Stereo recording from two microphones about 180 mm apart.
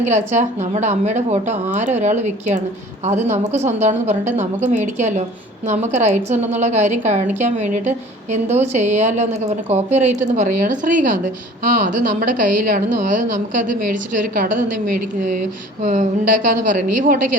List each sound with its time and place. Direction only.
0.0 s a woman's voice: 40° right (ahead or behind)